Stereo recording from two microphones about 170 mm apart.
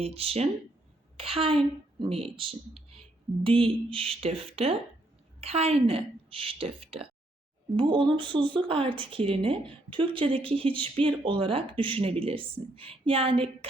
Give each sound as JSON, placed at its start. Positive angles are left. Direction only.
{"t": 0.0, "sound": "a woman's voice", "side_deg": -35}